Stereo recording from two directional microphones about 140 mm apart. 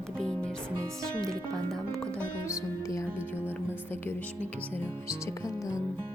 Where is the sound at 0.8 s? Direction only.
25° right (ahead or behind).